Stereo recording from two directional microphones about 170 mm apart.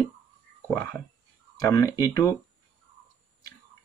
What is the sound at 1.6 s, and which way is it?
Speech, 20° left (ahead or behind).